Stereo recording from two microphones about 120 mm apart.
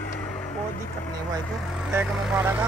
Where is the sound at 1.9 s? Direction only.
15° right (ahead or behind).